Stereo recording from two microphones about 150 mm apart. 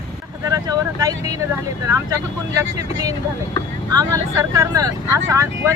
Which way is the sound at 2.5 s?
25° right (ahead or behind).